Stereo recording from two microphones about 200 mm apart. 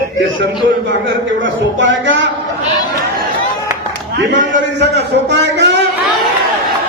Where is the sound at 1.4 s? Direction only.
70° right (ahead or behind).